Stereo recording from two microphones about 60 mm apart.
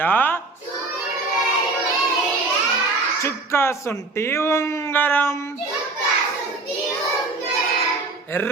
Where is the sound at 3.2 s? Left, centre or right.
Left.